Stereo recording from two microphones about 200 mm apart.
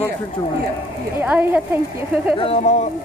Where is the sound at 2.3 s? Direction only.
30° left (ahead or behind).